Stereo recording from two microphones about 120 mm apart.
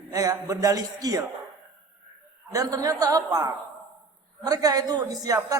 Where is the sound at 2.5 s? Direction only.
30° right (ahead or behind).